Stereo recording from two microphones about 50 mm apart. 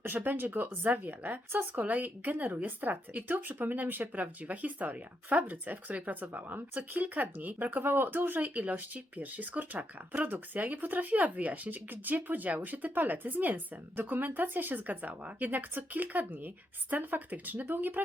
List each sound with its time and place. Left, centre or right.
0.0 s speech: right
8.5 s speech: right